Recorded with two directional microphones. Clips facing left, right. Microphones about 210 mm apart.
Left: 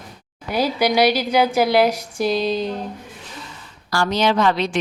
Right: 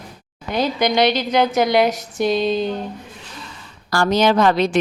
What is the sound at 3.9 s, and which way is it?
Speech, 45° right (ahead or behind).